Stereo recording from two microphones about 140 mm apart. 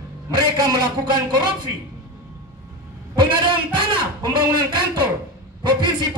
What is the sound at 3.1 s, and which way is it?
A man's voice, 35° right (ahead or behind).